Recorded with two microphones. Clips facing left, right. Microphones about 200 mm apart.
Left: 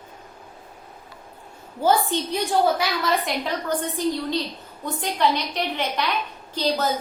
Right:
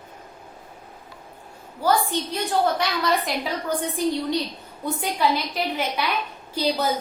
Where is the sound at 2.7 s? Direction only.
5° left (ahead or behind).